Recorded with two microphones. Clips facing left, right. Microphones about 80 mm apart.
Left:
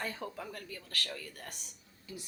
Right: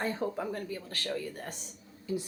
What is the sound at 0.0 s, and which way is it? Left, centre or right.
Speech, right.